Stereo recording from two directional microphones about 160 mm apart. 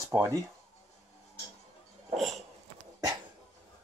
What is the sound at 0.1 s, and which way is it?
Speech, 15° right (ahead or behind).